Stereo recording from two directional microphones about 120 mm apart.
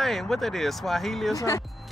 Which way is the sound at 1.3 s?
25° left (ahead or behind).